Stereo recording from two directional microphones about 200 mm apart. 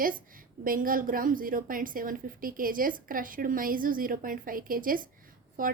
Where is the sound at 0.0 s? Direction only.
45° right (ahead or behind).